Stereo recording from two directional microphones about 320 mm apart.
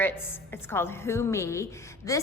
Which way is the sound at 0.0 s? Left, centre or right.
Centre.